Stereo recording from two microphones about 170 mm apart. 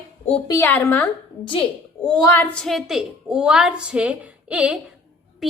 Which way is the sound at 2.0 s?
25° left (ahead or behind).